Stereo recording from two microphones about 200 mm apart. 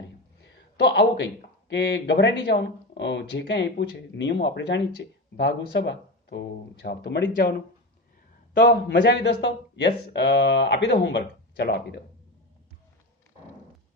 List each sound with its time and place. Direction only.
0.9 s speech: 60° left (ahead or behind)
8.5 s speech: 60° left (ahead or behind)